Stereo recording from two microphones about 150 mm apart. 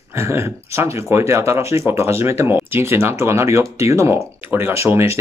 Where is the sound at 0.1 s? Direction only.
20° right (ahead or behind).